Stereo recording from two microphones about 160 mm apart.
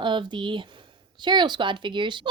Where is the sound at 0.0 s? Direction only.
30° right (ahead or behind).